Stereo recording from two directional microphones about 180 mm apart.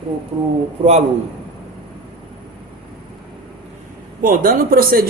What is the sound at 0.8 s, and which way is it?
Speech, 40° right (ahead or behind).